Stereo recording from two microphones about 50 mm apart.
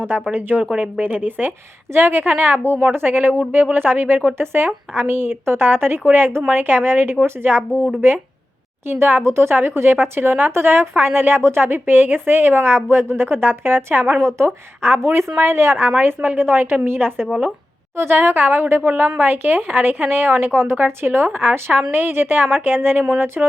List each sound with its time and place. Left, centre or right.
0.3 s speech: right
1.9 s a woman's voice: right
8.9 s a woman's voice: right
14.2 s speech: right
16.0 s a woman's voice: right